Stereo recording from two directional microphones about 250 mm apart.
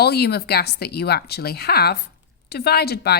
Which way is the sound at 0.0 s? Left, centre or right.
Left.